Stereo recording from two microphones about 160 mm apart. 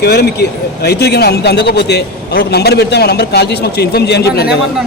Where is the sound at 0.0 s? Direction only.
85° left.